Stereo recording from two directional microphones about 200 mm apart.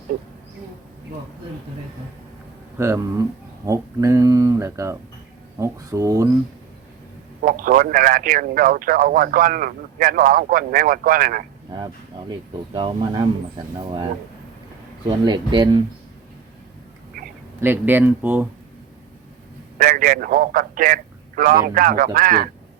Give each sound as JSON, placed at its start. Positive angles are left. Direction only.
{"t": 2.7, "sound": "speech", "side_deg": -15}
{"t": 7.4, "sound": "speech", "side_deg": -45}
{"t": 12.3, "sound": "speech", "side_deg": -25}
{"t": 15.0, "sound": "speech", "side_deg": -20}
{"t": 17.6, "sound": "speech", "side_deg": -10}
{"t": 19.8, "sound": "speech", "side_deg": -40}